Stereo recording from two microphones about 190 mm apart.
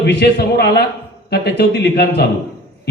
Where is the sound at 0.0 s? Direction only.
60° left (ahead or behind).